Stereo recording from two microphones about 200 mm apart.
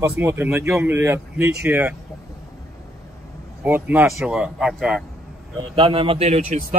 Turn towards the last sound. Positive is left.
turn(degrees=-30)  # may be behind; listen again after turning